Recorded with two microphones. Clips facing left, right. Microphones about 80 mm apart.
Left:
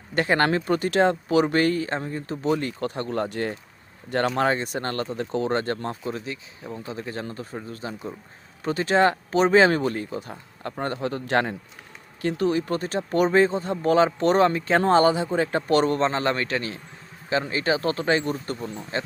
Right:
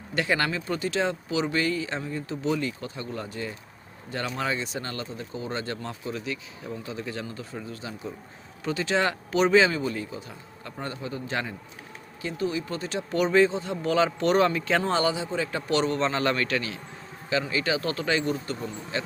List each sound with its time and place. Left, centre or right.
0.1 s speech: left